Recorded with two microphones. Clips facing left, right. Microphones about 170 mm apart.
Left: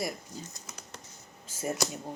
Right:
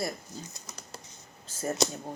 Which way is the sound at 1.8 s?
20° right (ahead or behind).